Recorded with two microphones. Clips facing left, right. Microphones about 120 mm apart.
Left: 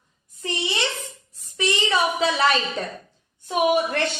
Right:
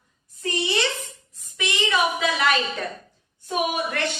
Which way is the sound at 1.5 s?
30° left (ahead or behind).